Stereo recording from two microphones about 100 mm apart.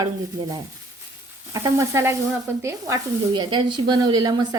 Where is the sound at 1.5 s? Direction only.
30° right (ahead or behind).